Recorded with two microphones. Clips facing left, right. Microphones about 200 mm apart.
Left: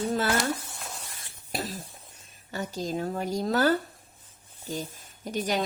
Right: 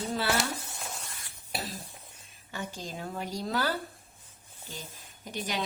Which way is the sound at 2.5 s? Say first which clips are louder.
Left 7 dB; 40° left (ahead or behind).